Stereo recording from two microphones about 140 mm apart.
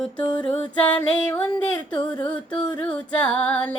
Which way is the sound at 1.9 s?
35° left (ahead or behind).